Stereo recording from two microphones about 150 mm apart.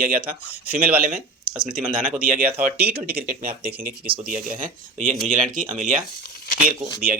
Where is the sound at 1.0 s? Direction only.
70° right (ahead or behind).